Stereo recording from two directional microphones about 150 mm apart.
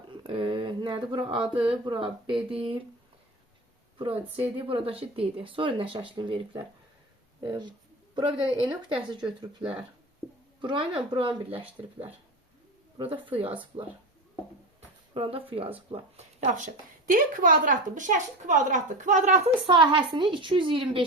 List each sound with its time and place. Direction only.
0.2 s speech: 35° right (ahead or behind)
3.9 s a woman's voice: 35° right (ahead or behind)
13.0 s speech: 35° right (ahead or behind)
15.1 s speech: 40° right (ahead or behind); by 19.4 s 55° right (ahead or behind)
19.6 s speech: 35° right (ahead or behind)